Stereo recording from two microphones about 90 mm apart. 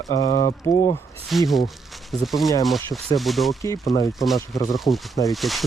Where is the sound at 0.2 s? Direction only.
65° left (ahead or behind).